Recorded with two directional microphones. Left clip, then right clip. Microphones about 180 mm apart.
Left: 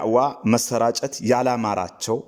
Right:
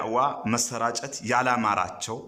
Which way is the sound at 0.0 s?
30° left (ahead or behind).